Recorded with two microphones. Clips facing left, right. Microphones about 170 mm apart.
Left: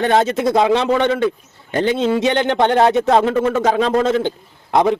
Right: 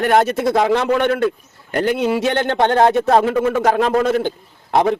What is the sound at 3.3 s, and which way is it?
Speech, 10° right (ahead or behind).